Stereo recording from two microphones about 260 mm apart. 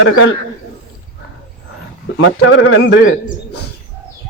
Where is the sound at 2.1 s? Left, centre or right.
Left.